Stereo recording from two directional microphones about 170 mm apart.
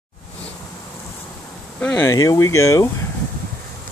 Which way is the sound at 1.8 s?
15° left (ahead or behind).